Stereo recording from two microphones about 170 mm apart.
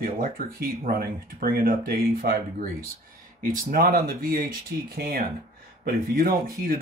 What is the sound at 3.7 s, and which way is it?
Speech, 55° right (ahead or behind).